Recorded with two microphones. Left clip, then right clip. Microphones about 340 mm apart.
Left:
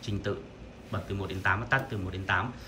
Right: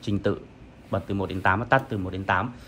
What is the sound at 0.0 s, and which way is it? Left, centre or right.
A man's voice, centre.